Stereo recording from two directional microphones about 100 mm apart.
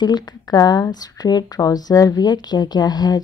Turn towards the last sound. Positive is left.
turn(degrees=45)  # may be behind; listen again after turning